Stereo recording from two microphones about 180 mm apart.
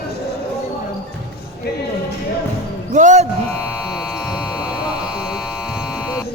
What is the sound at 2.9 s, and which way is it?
Speech, 40° right (ahead or behind).